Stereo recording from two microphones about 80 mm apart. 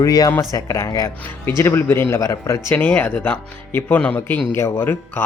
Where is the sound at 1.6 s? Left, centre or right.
Left.